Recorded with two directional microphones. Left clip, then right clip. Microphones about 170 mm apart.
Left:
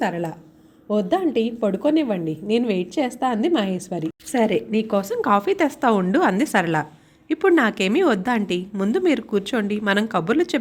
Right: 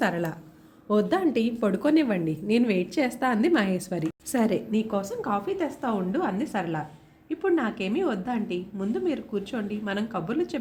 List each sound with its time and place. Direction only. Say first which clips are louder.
0.0 s a woman's voice: left 3 dB; 5° left (ahead or behind); by 10.6 s 35° left (ahead or behind)